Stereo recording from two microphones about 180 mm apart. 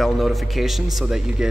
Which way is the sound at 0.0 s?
Centre (ahead or behind).